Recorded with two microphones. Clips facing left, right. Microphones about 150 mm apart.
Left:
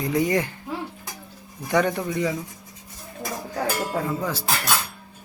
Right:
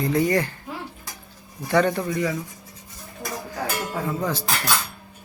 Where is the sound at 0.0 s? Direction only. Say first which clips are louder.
Right 1 dB; 15° left (ahead or behind).